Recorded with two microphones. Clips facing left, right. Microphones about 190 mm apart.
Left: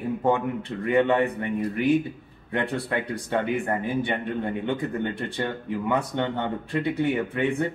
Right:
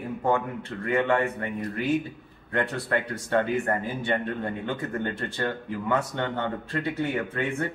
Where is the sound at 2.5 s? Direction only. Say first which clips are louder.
Even; 15° left (ahead or behind).